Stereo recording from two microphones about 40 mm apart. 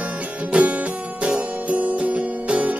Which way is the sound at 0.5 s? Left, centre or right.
Right.